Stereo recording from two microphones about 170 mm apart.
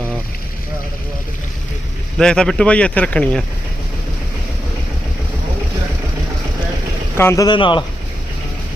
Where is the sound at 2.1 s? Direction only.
5° left (ahead or behind).